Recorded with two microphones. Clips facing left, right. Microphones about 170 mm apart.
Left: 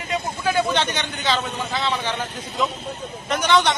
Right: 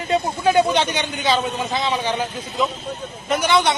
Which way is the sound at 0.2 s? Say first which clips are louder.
Right 4 dB; 50° right (ahead or behind).